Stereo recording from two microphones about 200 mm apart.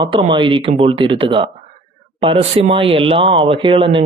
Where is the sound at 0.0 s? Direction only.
25° right (ahead or behind).